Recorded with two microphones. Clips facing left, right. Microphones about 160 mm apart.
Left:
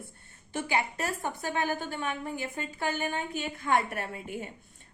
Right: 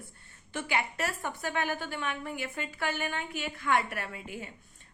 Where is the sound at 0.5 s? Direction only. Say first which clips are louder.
Left 2 dB; 35° left (ahead or behind).